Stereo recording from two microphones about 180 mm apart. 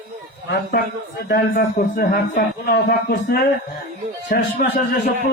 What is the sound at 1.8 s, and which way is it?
Speech, 50° left (ahead or behind).